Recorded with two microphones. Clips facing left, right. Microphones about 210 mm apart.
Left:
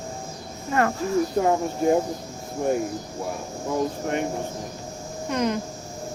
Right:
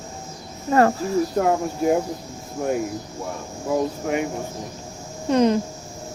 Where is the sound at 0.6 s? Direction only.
35° right (ahead or behind).